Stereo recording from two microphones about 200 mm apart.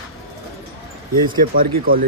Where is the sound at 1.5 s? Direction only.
45° right (ahead or behind).